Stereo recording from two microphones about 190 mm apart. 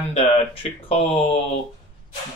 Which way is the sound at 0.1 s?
30° left (ahead or behind).